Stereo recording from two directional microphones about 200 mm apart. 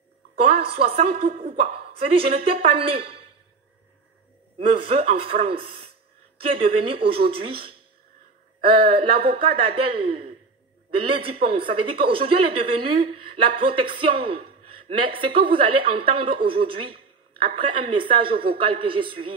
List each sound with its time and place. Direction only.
0.4 s a woman's voice: 30° right (ahead or behind)
4.6 s a woman's voice: 30° right (ahead or behind)